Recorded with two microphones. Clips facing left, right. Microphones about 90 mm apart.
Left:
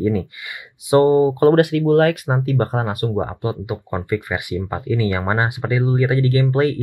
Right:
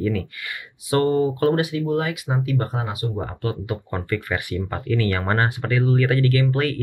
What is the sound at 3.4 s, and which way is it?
Speech, 15° left (ahead or behind).